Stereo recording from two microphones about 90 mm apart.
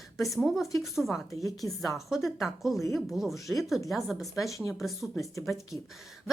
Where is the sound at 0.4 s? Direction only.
Centre (ahead or behind).